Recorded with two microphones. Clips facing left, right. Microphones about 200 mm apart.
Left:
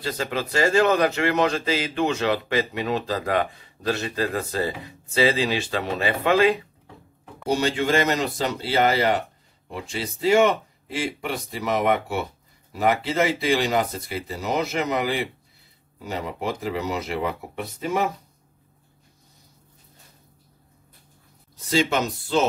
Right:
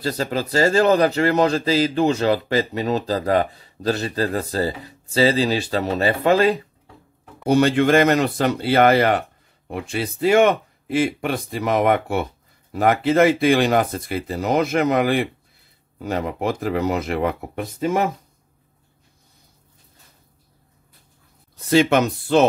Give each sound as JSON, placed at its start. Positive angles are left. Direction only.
{"t": 0.0, "sound": "speech", "side_deg": -35}
{"t": 7.4, "sound": "speech", "side_deg": -60}
{"t": 21.5, "sound": "speech", "side_deg": -60}